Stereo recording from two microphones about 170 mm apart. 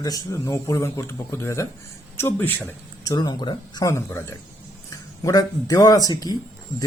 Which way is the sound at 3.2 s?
25° left (ahead or behind).